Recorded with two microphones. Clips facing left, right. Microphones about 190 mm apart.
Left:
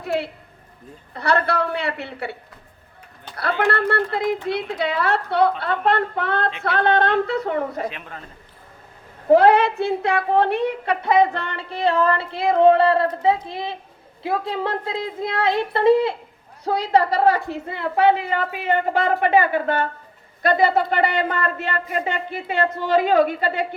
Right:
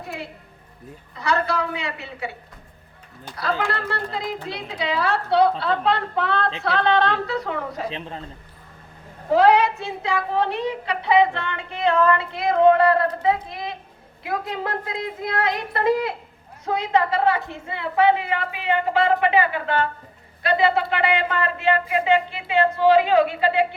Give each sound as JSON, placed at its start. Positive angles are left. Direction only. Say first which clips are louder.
{"t": 1.1, "sound": "a woman's voice", "louder": "left 2 dB", "side_deg": 60}
{"t": 3.6, "sound": "a woman's voice", "louder": "left 6 dB", "side_deg": 60}
{"t": 7.9, "sound": "a woman's voice", "louder": "right 1 dB", "side_deg": -25}
{"t": 9.3, "sound": "a woman's voice", "louder": "left 3 dB", "side_deg": 55}